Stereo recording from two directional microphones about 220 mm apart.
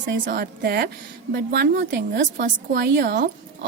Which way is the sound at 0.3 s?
45° right (ahead or behind).